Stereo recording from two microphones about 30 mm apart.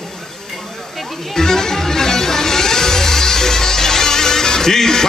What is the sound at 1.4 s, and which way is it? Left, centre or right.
Music, centre.